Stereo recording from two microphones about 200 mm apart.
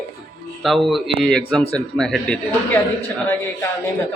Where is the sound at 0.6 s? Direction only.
Centre (ahead or behind).